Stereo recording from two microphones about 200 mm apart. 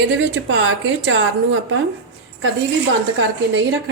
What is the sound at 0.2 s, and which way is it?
A woman's voice, 70° right (ahead or behind).